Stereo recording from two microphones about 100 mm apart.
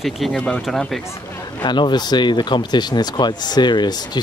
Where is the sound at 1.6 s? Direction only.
50° left (ahead or behind).